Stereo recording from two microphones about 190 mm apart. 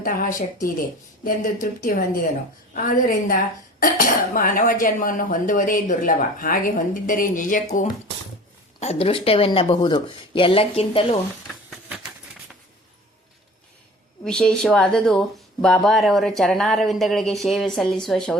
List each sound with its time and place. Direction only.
0.0 s speech: 45° left (ahead or behind)
8.8 s speech: 30° left (ahead or behind)
14.3 s speech: 5° left (ahead or behind)